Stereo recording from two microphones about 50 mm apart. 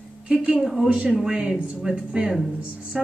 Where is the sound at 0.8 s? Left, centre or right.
Right.